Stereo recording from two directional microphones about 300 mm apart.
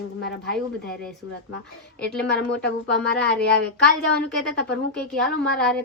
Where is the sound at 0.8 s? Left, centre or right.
Left.